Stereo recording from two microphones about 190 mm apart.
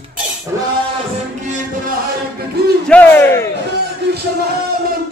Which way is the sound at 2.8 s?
10° left (ahead or behind).